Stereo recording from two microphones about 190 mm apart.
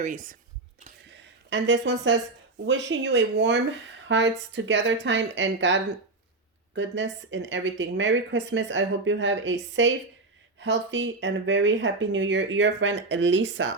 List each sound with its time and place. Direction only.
0.0 s speech: 45° right (ahead or behind)
1.1 s a sound: 75° right (ahead or behind)
2.6 s a woman's voice: 70° right (ahead or behind)